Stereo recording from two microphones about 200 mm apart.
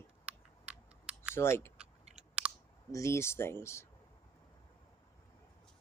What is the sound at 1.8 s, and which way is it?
Chewing, 5° right (ahead or behind).